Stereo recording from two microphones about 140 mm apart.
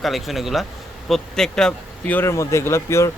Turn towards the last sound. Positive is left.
turn(degrees=20)  # may be behind; listen again after turning